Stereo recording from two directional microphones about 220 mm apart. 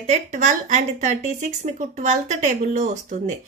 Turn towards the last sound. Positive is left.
turn(degrees=-35)  # may be behind; listen again after turning